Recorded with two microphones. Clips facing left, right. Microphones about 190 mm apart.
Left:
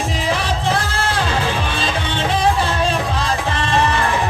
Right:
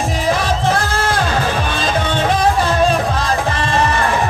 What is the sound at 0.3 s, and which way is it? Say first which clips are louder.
Music: right 4 dB; 45° right (ahead or behind).